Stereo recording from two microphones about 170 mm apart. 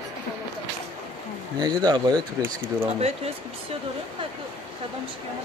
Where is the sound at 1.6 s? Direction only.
25° right (ahead or behind).